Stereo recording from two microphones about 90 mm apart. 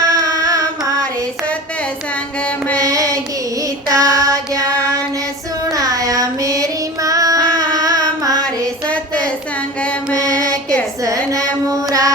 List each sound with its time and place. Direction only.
0.0 s carnatic music: 40° right (ahead or behind)
2.7 s child singing: 40° right (ahead or behind)
5.7 s child singing: 40° right (ahead or behind)
10.2 s mantra: 35° right (ahead or behind)
10.5 s a sound: 10° left (ahead or behind)
11.7 s mantra: 40° right (ahead or behind)